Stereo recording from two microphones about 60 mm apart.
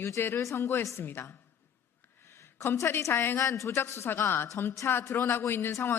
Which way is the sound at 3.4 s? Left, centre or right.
Left.